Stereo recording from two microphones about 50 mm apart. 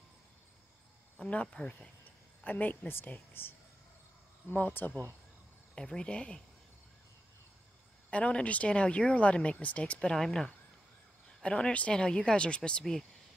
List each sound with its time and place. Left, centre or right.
1.1 s speech: left
2.4 s speech: left
5.8 s speech: centre
8.1 s speech: left
9.9 s speech: centre
11.4 s speech: left